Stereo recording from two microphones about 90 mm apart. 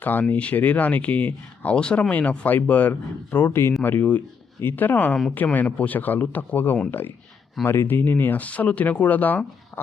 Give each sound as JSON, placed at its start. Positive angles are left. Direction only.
{"t": 0.0, "sound": "speech", "side_deg": 20}